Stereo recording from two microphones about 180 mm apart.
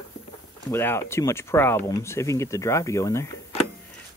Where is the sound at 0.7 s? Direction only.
15° left (ahead or behind).